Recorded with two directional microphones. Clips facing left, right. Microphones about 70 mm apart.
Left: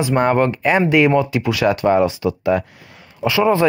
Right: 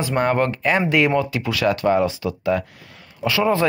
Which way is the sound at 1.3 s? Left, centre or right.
Centre.